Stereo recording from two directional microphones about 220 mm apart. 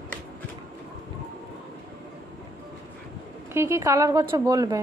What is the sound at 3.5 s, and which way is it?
Speech, 10° right (ahead or behind).